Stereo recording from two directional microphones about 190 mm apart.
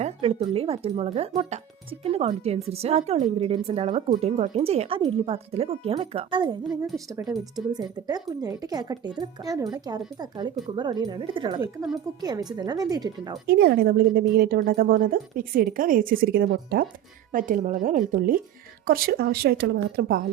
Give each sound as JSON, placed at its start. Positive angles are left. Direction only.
{"t": 0.0, "sound": "speech", "side_deg": -30}
{"t": 7.1, "sound": "speech", "side_deg": -10}
{"t": 11.6, "sound": "speech", "side_deg": -15}
{"t": 13.5, "sound": "a woman's voice", "side_deg": -55}